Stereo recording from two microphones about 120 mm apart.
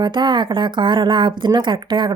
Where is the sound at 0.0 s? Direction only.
40° right (ahead or behind).